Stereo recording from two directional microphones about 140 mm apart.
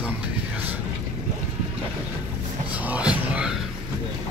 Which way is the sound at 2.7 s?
10° right (ahead or behind).